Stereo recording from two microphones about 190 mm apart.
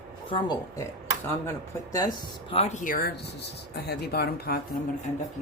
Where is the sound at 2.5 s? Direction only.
35° left (ahead or behind); by 4.6 s 55° left (ahead or behind).